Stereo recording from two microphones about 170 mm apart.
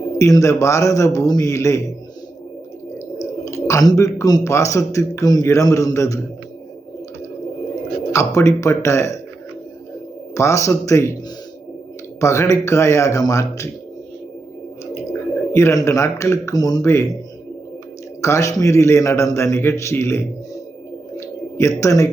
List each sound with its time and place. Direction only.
0.2 s a man's voice: 20° left (ahead or behind)
3.4 s a man's voice: 20° left (ahead or behind)
8.1 s a man's voice: 15° left (ahead or behind)
10.3 s a man's voice: 20° left (ahead or behind)
12.2 s a man's voice: 15° left (ahead or behind)
15.5 s a man's voice: 15° left (ahead or behind)
18.2 s a man's voice: 15° left (ahead or behind)
21.2 s a sound: 15° left (ahead or behind)